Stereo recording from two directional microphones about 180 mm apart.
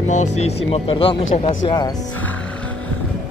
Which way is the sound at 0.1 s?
40° left (ahead or behind).